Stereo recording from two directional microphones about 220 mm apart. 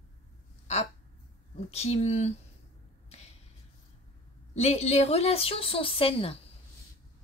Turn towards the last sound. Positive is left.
turn(degrees=25)  # may be behind; listen again after turning